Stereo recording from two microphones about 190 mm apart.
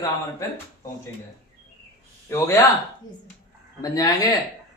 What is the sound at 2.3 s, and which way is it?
Speech, 15° left (ahead or behind).